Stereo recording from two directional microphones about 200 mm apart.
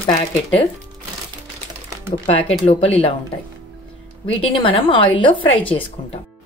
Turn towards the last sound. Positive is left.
turn(degrees=25)  # may be behind; listen again after turning